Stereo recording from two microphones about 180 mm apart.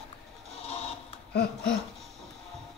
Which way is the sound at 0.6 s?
35° left (ahead or behind).